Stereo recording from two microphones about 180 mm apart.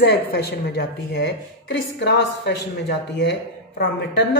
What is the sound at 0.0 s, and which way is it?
A woman's voice, 60° left (ahead or behind).